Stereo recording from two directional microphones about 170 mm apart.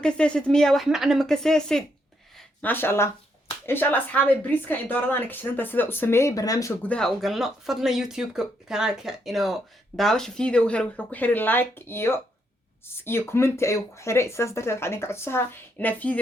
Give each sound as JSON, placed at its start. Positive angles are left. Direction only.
{"t": 0.0, "sound": "speech", "side_deg": 5}
{"t": 6.8, "sound": "speech", "side_deg": 5}